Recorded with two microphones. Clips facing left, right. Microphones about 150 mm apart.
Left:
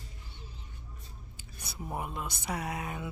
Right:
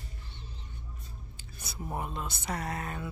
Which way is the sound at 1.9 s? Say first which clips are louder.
Right 1 dB; 10° left (ahead or behind).